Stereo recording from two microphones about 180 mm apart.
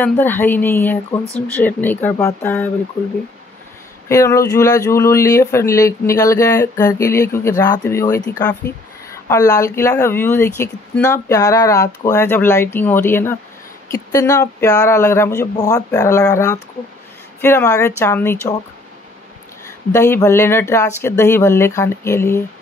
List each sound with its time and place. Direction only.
0.0 s a woman's voice: 10° left (ahead or behind)
4.1 s a woman's voice: 15° left (ahead or behind)
19.9 s a woman's voice: 15° left (ahead or behind)